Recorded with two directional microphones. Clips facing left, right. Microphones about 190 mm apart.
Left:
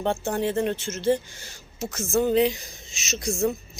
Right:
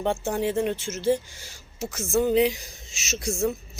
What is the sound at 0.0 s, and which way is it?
Speech, 10° right (ahead or behind).